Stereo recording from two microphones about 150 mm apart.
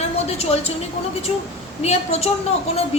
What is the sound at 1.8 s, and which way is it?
Speech, 45° left (ahead or behind).